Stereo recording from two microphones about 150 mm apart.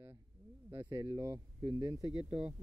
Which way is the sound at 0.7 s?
30° right (ahead or behind).